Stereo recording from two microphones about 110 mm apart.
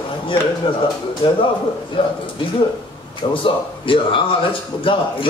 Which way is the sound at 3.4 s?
50° left (ahead or behind).